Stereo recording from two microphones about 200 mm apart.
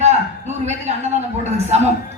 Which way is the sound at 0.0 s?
35° right (ahead or behind).